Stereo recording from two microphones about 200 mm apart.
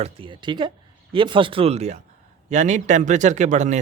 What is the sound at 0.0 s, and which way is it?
Speech, 25° right (ahead or behind).